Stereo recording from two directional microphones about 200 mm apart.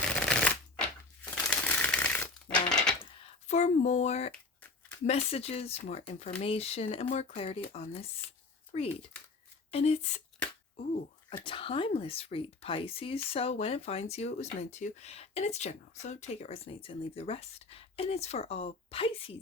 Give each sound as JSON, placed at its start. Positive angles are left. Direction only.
{"t": 0.1, "sound": "shuffling cards", "side_deg": 5}
{"t": 3.0, "sound": "a sound", "side_deg": 35}
{"t": 5.0, "sound": "speech", "side_deg": 30}
{"t": 11.4, "sound": "speech", "side_deg": 25}